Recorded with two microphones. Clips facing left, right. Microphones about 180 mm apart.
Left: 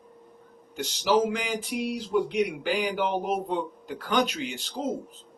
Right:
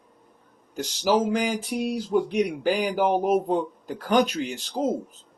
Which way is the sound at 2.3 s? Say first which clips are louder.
Right 3 dB; 45° right (ahead or behind).